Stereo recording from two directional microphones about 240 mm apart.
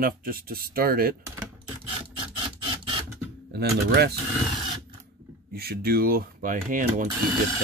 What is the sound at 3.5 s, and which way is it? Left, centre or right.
Speech, right.